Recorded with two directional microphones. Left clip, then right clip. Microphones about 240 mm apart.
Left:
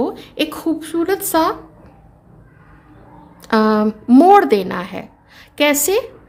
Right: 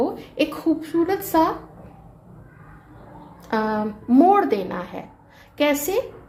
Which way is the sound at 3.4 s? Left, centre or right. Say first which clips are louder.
Left 8 dB; left.